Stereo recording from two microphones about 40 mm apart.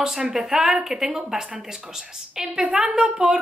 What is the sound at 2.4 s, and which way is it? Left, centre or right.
Speech, right.